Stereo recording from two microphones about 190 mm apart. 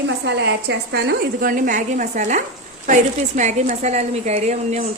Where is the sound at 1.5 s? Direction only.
45° right (ahead or behind).